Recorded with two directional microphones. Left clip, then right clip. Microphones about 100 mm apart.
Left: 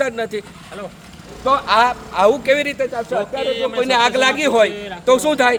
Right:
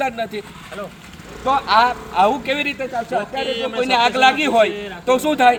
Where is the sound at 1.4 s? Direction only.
55° left (ahead or behind).